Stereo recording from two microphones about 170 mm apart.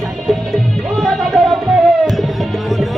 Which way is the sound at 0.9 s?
Centre (ahead or behind).